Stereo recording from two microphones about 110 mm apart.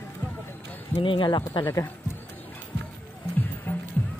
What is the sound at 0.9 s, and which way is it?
Speech, 50° left (ahead or behind).